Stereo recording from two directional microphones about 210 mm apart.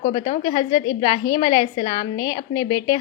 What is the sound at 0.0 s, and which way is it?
Speech, 35° left (ahead or behind).